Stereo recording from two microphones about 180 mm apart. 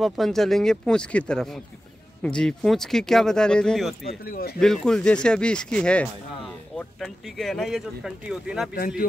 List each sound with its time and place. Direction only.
0.0 s speech: centre (ahead or behind)
4.1 s speech: 55° left (ahead or behind)
4.6 s speech: 5° left (ahead or behind)